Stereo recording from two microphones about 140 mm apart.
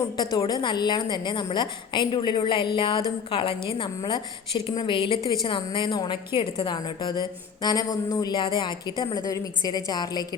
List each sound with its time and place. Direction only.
0.2 s a woman's voice: 25° left (ahead or behind)